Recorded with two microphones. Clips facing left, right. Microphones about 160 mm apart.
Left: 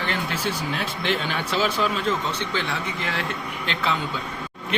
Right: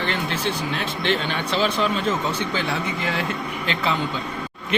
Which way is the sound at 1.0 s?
10° left (ahead or behind).